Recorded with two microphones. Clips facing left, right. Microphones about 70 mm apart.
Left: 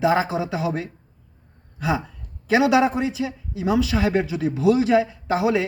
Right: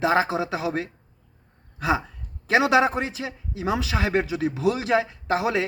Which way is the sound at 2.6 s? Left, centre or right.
Right.